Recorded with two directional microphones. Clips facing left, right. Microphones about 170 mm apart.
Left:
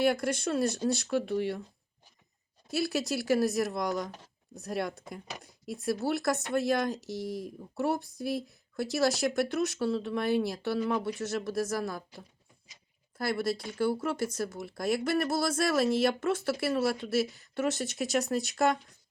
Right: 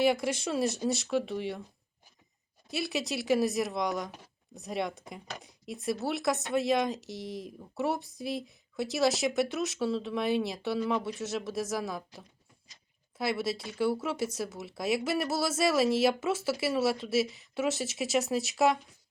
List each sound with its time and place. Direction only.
0.0 s speech: centre (ahead or behind)
2.6 s speech: centre (ahead or behind)
13.1 s speech: centre (ahead or behind)